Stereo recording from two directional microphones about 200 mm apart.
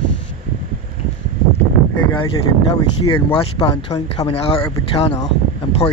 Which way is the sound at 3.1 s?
25° left (ahead or behind).